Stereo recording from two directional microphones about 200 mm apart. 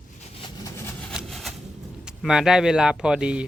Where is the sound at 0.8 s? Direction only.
10° left (ahead or behind).